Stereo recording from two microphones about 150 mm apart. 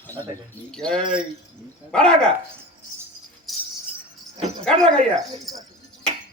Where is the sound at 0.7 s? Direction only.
5° left (ahead or behind).